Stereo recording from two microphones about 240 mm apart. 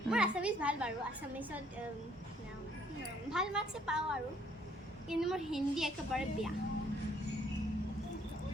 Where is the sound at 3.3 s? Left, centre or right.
Centre.